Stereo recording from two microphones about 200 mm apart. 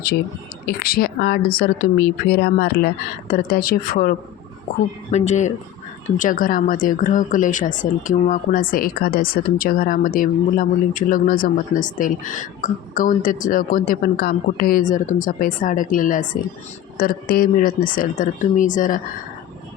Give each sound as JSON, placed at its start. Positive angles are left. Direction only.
{"t": 0.6, "sound": "a woman's voice", "side_deg": 50}
{"t": 5.1, "sound": "a woman's voice", "side_deg": 35}